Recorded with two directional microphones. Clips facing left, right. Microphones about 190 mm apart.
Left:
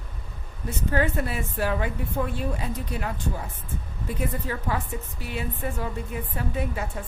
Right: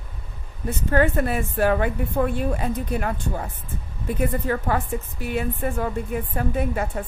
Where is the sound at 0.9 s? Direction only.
55° right (ahead or behind).